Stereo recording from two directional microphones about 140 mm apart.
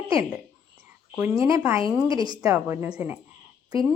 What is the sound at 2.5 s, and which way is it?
Speech, 15° right (ahead or behind).